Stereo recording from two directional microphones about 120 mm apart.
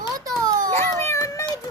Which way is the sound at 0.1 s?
30° right (ahead or behind).